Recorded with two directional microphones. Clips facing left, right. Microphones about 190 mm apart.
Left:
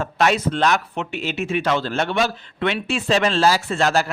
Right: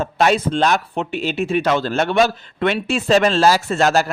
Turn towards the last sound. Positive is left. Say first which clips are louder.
# right 3 dB
turn(degrees=-45)  # may be behind; listen again after turning